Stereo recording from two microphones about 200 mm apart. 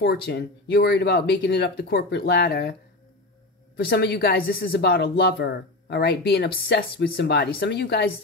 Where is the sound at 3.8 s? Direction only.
55° left (ahead or behind).